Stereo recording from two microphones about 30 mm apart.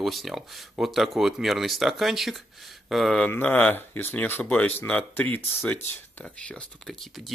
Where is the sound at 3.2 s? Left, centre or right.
Left.